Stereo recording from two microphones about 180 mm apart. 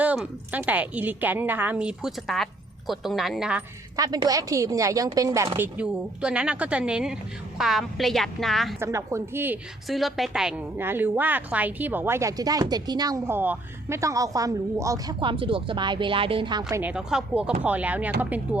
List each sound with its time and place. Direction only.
0.0 s a woman's voice: 10° right (ahead or behind)
3.9 s a woman's voice: 20° right (ahead or behind); by 8.7 s centre (ahead or behind)
8.8 s a woman's voice: 15° right (ahead or behind)
9.9 s a woman's voice: centre (ahead or behind); by 16.8 s 20° right (ahead or behind)
16.8 s a woman's voice: 5° right (ahead or behind)